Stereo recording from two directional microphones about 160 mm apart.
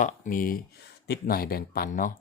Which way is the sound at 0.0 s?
60° left (ahead or behind).